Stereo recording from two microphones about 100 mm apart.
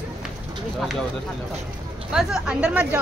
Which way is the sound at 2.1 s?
5° right (ahead or behind).